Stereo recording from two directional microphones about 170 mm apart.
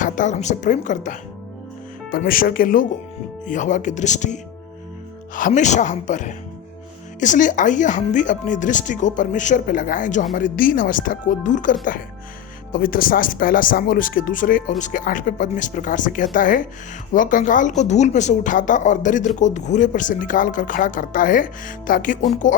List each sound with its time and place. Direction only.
0.0 s speech: 45° left (ahead or behind)